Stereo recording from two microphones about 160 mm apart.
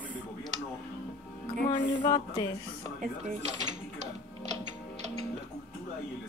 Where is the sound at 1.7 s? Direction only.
30° left (ahead or behind).